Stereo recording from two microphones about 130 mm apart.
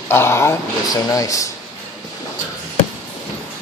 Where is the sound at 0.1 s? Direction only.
20° left (ahead or behind).